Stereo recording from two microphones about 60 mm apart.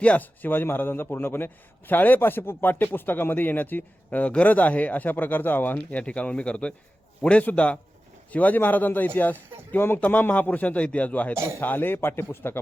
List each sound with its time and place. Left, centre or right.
0.0 s a man's voice: left
0.4 s speech: left
5.9 s a man's voice: left